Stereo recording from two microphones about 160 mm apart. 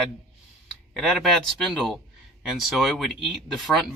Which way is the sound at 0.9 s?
Centre (ahead or behind).